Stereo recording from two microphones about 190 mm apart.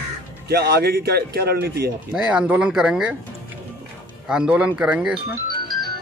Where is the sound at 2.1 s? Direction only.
5° right (ahead or behind).